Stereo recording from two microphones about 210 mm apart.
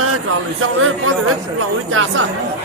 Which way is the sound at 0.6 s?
75° right (ahead or behind).